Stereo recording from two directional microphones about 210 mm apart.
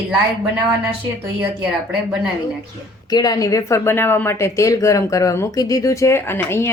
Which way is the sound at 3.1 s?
20° left (ahead or behind).